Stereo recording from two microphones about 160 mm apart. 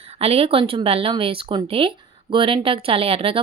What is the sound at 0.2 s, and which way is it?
A woman's voice, 40° right (ahead or behind).